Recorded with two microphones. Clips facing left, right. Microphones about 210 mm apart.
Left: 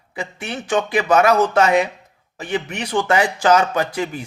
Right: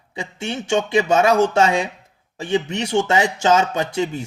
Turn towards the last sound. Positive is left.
turn(degrees=-25)  # may be behind; listen again after turning